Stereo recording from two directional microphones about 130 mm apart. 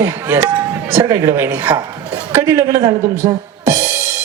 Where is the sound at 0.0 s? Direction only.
15° right (ahead or behind).